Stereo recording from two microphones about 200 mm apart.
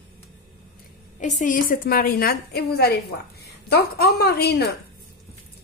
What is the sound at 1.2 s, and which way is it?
A woman's voice, 40° left (ahead or behind).